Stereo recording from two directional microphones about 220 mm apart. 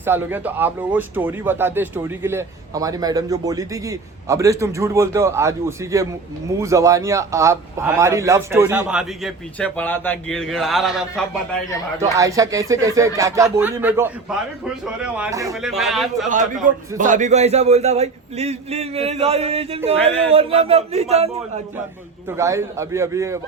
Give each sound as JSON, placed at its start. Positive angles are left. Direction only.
{"t": 0.0, "sound": "speech", "side_deg": -10}
{"t": 12.1, "sound": "a man's voice", "side_deg": -15}
{"t": 15.5, "sound": "a man's voice", "side_deg": 0}
{"t": 17.0, "sound": "a man's voice", "side_deg": -35}
{"t": 22.3, "sound": "speech", "side_deg": -15}